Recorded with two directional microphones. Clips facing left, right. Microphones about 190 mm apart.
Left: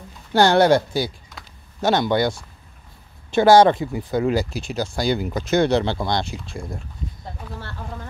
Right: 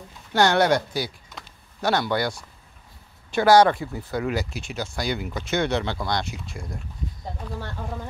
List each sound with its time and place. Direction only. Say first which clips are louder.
0.3 s speech: left 4 dB; 30° left (ahead or behind)
4.2 s speech: left 6 dB; 30° left (ahead or behind)
7.5 s speech: right 2 dB; 15° right (ahead or behind)